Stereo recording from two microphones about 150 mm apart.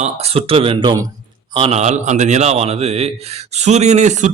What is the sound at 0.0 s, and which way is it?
A man's voice, 40° right (ahead or behind).